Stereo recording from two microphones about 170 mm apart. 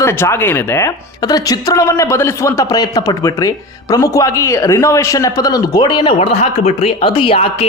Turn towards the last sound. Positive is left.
turn(degrees=30)  # may be behind; listen again after turning